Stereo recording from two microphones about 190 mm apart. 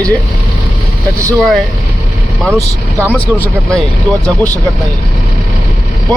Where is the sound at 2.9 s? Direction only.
10° right (ahead or behind).